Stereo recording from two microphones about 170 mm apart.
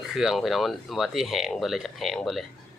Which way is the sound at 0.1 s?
Centre (ahead or behind).